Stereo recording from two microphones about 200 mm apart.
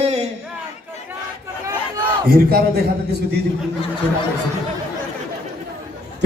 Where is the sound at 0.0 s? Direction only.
30° right (ahead or behind).